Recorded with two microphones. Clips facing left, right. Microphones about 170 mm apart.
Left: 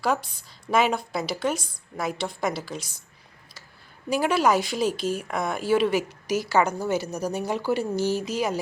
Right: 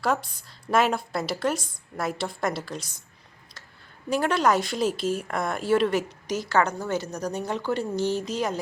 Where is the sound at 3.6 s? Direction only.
Centre (ahead or behind).